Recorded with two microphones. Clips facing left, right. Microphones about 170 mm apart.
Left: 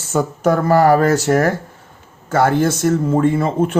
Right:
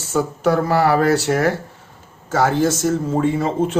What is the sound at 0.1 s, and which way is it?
Speech, 50° left (ahead or behind).